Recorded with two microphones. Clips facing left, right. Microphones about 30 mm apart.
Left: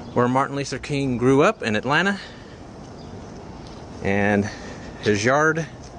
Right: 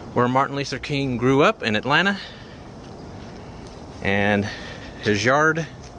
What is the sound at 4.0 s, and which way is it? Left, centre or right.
Speech, right.